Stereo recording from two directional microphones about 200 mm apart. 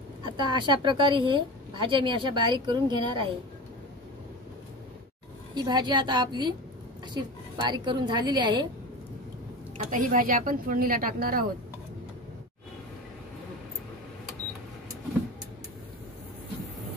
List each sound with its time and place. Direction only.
0.4 s speech: 20° right (ahead or behind)
5.5 s speech: 20° right (ahead or behind)
9.8 s speech: 40° right (ahead or behind)